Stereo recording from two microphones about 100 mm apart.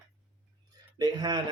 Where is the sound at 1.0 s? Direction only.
45° right (ahead or behind).